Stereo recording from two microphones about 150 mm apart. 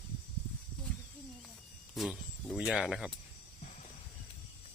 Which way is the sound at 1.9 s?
Centre (ahead or behind).